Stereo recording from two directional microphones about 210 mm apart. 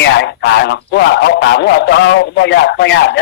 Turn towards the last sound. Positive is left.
turn(degrees=55)  # may be behind; listen again after turning